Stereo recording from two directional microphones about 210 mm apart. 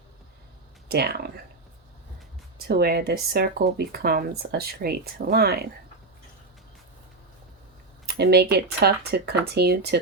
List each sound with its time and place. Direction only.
0.9 s speech: 50° right (ahead or behind)
2.6 s speech: 50° right (ahead or behind)
8.0 s speech: 50° right (ahead or behind)